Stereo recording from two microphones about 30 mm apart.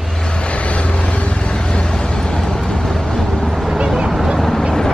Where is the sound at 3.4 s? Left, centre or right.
Centre.